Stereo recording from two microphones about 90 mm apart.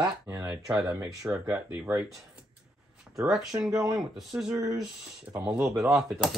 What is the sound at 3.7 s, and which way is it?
Speech, 40° right (ahead or behind).